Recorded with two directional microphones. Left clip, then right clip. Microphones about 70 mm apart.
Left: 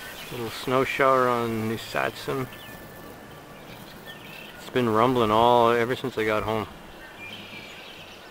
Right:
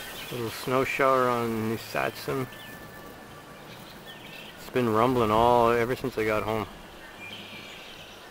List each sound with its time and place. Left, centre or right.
0.5 s speech: centre
4.7 s speech: centre